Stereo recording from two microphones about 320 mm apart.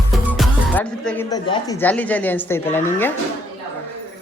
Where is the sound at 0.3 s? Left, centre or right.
Centre.